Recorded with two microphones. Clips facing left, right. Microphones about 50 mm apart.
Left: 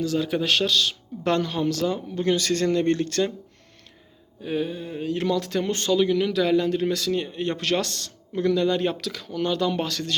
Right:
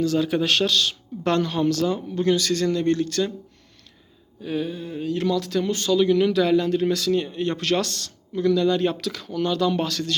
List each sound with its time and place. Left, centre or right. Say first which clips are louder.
0.0 s speech: right 3 dB; centre
2.4 s speech: even; left
4.4 s speech: even; centre; by 5.9 s left
6.1 s speech: right 3 dB; centre
9.4 s speech: right 2 dB; centre